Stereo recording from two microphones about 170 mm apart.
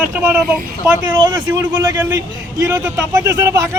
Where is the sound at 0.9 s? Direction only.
25° right (ahead or behind).